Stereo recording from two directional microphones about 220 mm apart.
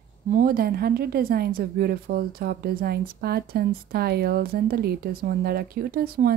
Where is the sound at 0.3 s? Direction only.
40° right (ahead or behind).